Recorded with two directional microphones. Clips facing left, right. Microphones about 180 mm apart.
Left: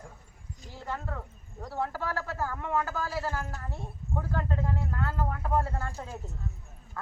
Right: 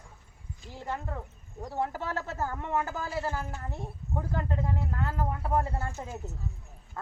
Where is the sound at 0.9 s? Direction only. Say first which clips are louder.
Right 1 dB; 20° right (ahead or behind).